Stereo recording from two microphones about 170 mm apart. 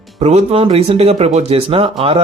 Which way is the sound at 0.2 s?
40° right (ahead or behind).